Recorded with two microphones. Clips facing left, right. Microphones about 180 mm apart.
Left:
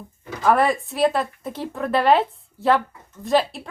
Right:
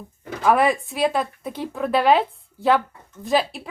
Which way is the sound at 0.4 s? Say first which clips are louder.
Even; 5° right (ahead or behind).